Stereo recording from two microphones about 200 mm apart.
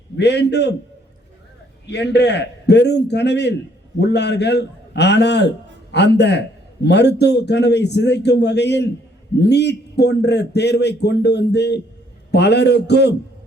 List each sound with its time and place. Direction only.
0.2 s a man's voice: 55° left (ahead or behind)
1.9 s a man's voice: 60° left (ahead or behind)